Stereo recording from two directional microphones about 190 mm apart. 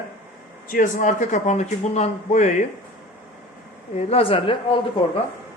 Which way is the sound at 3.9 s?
30° left (ahead or behind).